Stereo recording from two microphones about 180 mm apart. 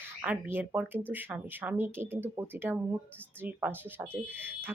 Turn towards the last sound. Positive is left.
turn(degrees=-10)  # may be behind; listen again after turning